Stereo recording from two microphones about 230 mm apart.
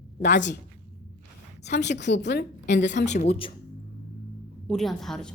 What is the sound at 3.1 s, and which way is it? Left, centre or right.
Speech, left.